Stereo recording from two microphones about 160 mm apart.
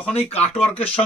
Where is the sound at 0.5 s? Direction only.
40° left (ahead or behind).